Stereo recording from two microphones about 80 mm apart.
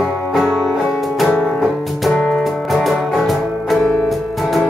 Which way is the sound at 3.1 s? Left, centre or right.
Centre.